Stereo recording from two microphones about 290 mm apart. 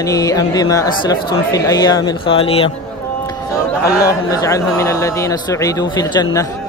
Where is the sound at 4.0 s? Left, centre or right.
Centre.